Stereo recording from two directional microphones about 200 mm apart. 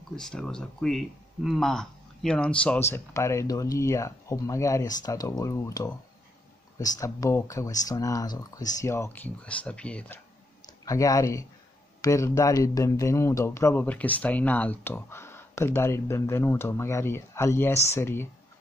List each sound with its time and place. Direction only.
0.1 s speech: 5° left (ahead or behind)